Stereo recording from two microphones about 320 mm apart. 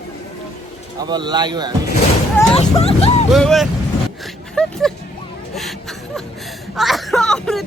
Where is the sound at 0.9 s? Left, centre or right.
Centre.